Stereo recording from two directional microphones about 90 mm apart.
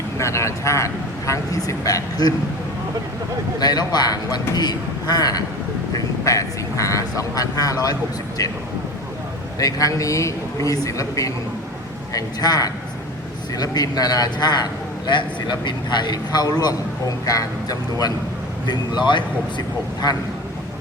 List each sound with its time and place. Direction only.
0.2 s speech: 35° left (ahead or behind)
3.6 s a man's voice: 50° left (ahead or behind)
5.9 s speech: 35° left (ahead or behind)
9.6 s a man's voice: 40° left (ahead or behind)
18.7 s a man's voice: 55° left (ahead or behind)